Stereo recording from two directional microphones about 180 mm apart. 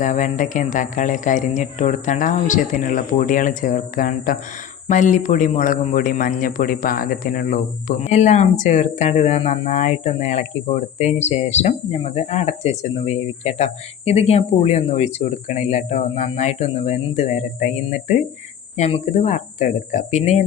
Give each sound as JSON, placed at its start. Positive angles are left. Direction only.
{"t": 0.0, "sound": "speech", "side_deg": 45}
{"t": 8.0, "sound": "speech", "side_deg": 40}